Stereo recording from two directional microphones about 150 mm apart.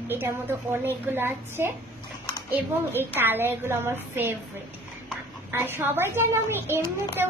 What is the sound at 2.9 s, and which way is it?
A woman's voice, 15° right (ahead or behind).